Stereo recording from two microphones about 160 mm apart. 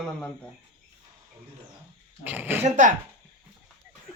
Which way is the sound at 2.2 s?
10° right (ahead or behind).